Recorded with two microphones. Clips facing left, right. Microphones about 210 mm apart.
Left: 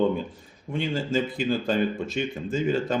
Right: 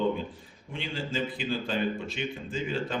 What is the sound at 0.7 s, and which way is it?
Speech, 45° left (ahead or behind).